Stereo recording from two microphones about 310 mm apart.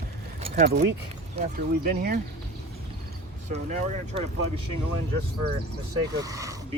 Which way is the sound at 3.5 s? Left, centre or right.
Right.